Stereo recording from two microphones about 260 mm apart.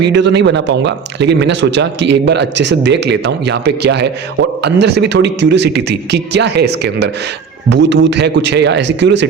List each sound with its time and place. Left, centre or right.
0.0 s a man's voice: right